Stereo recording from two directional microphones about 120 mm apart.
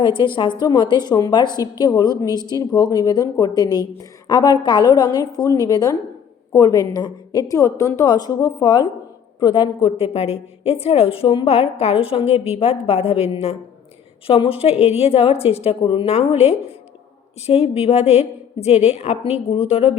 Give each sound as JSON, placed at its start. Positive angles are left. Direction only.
{"t": 0.0, "sound": "a woman's voice", "side_deg": 45}
{"t": 14.3, "sound": "a woman's voice", "side_deg": 50}
{"t": 15.8, "sound": "a woman's voice", "side_deg": 45}
{"t": 16.1, "sound": "a woman's voice", "side_deg": 55}